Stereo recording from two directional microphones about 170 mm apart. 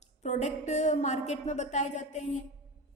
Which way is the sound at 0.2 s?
40° left (ahead or behind).